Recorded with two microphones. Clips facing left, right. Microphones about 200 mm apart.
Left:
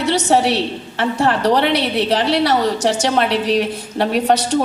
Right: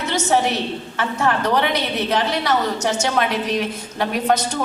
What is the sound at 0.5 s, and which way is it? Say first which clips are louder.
A woman's voice: left 3 dB; 30° left (ahead or behind).